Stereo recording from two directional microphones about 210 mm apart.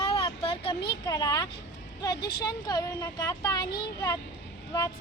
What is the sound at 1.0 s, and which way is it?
A woman's voice, 15° left (ahead or behind).